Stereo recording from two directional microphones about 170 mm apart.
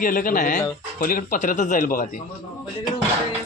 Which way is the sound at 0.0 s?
55° left (ahead or behind).